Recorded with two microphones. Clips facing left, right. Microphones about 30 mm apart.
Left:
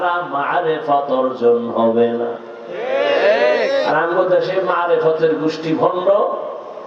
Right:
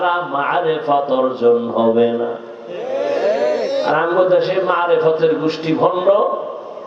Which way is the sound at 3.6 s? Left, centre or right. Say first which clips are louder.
Left 1 dB; centre.